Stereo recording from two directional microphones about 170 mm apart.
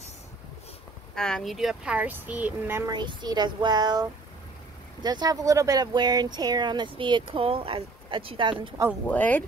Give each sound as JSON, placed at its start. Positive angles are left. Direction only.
{"t": 1.1, "sound": "speech", "side_deg": 5}
{"t": 2.9, "sound": "speech", "side_deg": -25}
{"t": 9.1, "sound": "speech", "side_deg": 10}